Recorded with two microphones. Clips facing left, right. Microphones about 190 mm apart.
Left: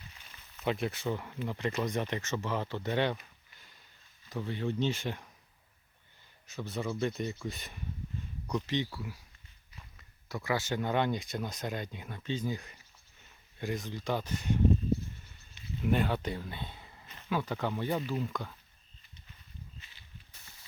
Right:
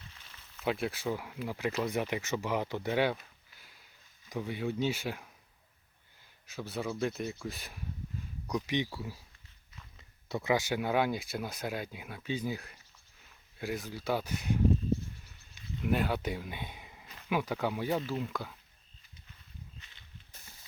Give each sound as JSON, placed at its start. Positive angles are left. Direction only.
{"t": 0.3, "sound": "speech", "side_deg": -5}
{"t": 6.5, "sound": "speech", "side_deg": -5}
{"t": 8.5, "sound": "speech", "side_deg": -15}
{"t": 15.8, "sound": "speech", "side_deg": -5}